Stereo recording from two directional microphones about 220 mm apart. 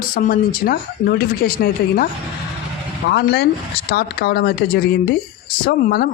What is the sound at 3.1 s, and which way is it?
Speech, 50° left (ahead or behind).